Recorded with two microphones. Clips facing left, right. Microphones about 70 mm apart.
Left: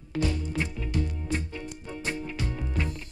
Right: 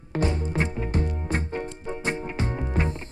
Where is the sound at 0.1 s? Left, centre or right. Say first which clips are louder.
Right 3 dB; right.